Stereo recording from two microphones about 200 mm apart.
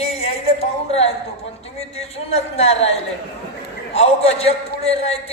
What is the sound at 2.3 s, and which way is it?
Speech, 30° left (ahead or behind).